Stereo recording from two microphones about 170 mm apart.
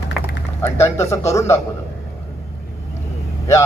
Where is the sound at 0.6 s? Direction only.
15° left (ahead or behind).